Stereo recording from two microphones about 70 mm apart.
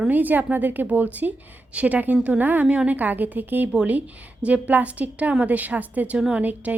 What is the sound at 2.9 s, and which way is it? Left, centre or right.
A woman's voice, right.